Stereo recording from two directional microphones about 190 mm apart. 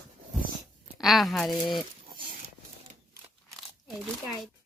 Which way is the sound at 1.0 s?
Centre (ahead or behind).